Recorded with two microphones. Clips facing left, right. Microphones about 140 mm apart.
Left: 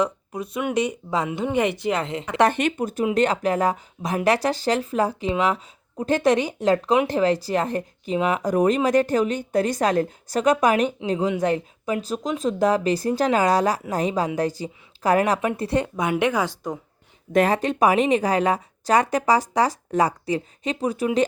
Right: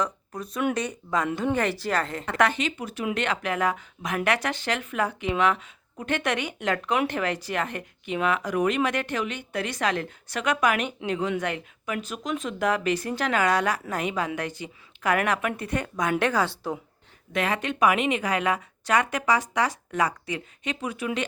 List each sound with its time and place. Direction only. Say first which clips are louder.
0.7 s speech: left 4 dB; 25° left (ahead or behind)
2.5 s a woman's voice: left 6 dB; 55° left (ahead or behind); by 16.0 s 30° left (ahead or behind)
16.0 s speech: left 2 dB; 20° left (ahead or behind)
17.3 s a woman's voice: left 8 dB; 40° left (ahead or behind)